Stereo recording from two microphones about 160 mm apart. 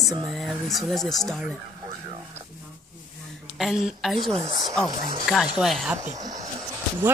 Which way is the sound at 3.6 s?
Centre (ahead or behind).